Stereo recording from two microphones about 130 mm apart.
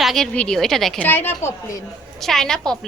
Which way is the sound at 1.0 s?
15° left (ahead or behind).